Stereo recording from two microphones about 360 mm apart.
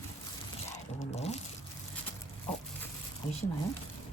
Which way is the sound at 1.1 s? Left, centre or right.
Centre.